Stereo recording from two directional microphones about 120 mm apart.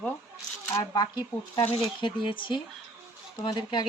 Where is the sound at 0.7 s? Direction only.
35° left (ahead or behind).